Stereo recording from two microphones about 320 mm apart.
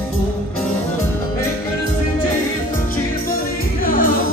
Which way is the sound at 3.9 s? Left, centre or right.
Left.